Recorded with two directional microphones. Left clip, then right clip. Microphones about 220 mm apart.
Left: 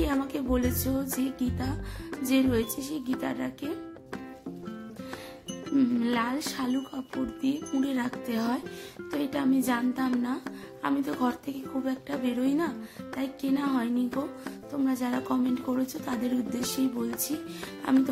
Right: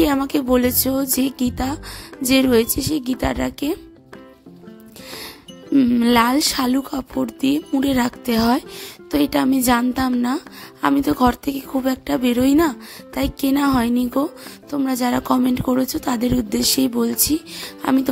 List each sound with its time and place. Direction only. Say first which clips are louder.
0.0 s speech: right 11 dB; 45° right (ahead or behind)
5.8 s speech: right 12 dB; 45° right (ahead or behind)